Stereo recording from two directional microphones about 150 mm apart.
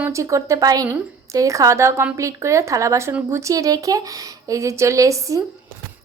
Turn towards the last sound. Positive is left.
turn(degrees=-20)  # may be behind; listen again after turning